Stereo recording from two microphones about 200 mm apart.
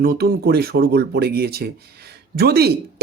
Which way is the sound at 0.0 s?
50° right (ahead or behind).